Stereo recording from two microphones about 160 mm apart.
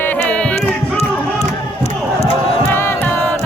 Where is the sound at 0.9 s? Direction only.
40° left (ahead or behind).